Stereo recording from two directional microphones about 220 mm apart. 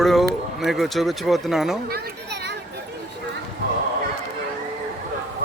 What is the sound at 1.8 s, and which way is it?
Children playing, 45° right (ahead or behind).